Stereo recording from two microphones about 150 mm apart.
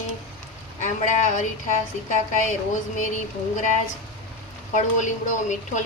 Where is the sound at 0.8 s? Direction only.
55° left (ahead or behind).